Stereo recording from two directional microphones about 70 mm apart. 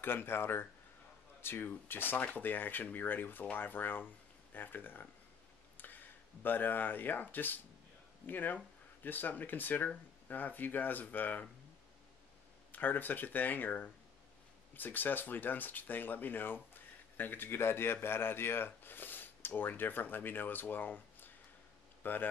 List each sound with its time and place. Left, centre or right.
0.0 s a man's voice: left
12.7 s a man's voice: left